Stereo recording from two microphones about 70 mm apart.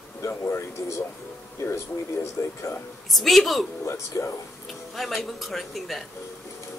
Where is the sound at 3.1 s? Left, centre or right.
Centre.